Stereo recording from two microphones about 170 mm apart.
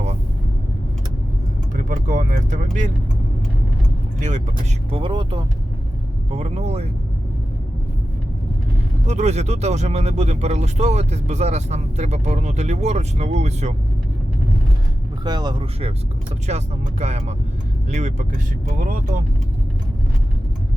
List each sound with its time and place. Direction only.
1.7 s vehicle: 50° right (ahead or behind)
4.2 s speech: 45° right (ahead or behind)
4.9 s speech: 30° right (ahead or behind)
6.3 s speech: 40° right (ahead or behind)
9.0 s speech: 40° right (ahead or behind)
15.2 s speech: 25° right (ahead or behind)
16.5 s speech: 40° right (ahead or behind)